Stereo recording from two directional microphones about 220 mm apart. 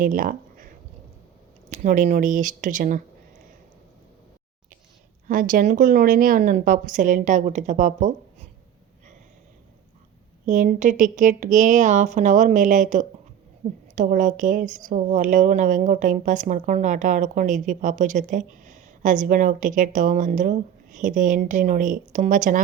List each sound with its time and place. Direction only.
0.0 s speech: 40° right (ahead or behind)
1.7 s speech: 35° right (ahead or behind)
5.3 s speech: 40° right (ahead or behind)
10.4 s speech: 35° right (ahead or behind)